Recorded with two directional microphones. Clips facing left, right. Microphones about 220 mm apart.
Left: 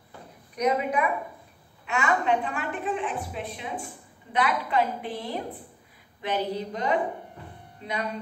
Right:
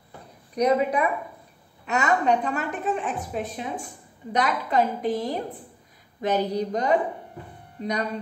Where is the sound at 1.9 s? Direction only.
40° right (ahead or behind).